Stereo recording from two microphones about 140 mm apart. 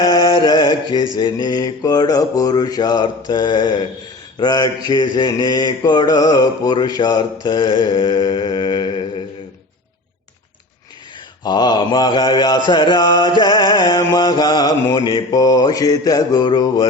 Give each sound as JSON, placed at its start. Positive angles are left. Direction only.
{"t": 0.0, "sound": "mantra", "side_deg": 30}
{"t": 11.4, "sound": "mantra", "side_deg": 30}